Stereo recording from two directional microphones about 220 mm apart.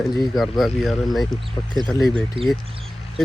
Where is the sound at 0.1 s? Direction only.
Centre (ahead or behind).